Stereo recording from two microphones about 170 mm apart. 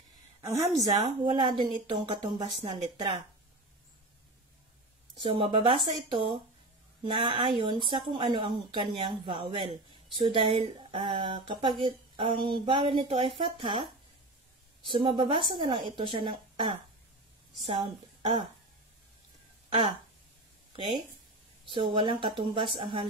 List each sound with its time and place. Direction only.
0.7 s a woman's voice: 20° right (ahead or behind)
5.2 s a woman's voice: 30° right (ahead or behind)
14.9 s a woman's voice: 30° right (ahead or behind)
20.7 s a woman's voice: 30° right (ahead or behind)